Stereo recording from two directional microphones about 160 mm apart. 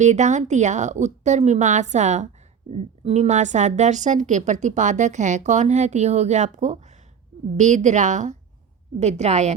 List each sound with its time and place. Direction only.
0.0 s a woman's voice: 45° right (ahead or behind)